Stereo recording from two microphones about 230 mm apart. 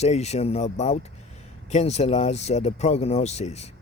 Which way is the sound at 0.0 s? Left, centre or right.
Left.